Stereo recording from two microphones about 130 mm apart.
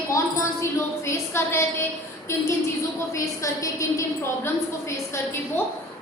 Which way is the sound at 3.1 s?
25° left (ahead or behind).